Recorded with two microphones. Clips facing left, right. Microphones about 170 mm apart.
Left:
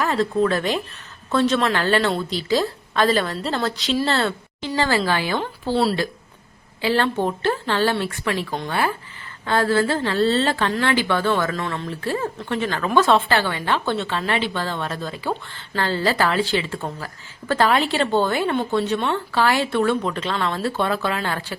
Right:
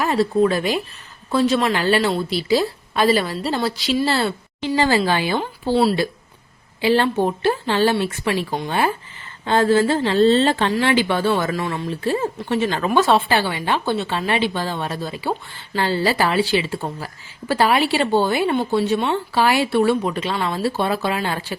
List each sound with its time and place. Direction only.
0.0 s a woman's voice: 15° right (ahead or behind)
5.7 s a woman's voice: centre (ahead or behind)
6.8 s a woman's voice: 15° right (ahead or behind)